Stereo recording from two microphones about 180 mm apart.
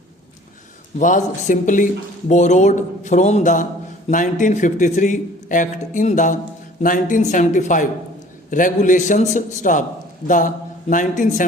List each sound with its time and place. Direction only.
0.9 s speech: 45° left (ahead or behind)